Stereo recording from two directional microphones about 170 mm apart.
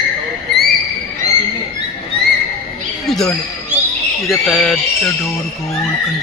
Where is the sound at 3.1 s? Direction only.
Centre (ahead or behind).